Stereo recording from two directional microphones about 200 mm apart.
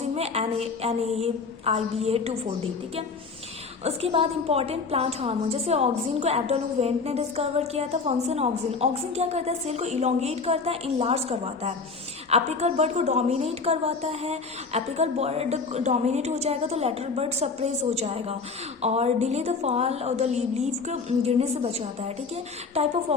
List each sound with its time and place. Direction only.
0.0 s a woman's voice: 30° right (ahead or behind)
3.8 s a woman's voice: 30° right (ahead or behind)